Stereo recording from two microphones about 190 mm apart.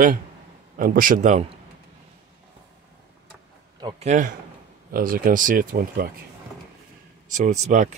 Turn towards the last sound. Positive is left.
turn(degrees=-40)  # may be behind; listen again after turning